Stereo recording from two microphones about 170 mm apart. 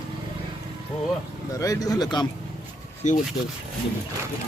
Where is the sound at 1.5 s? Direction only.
20° left (ahead or behind).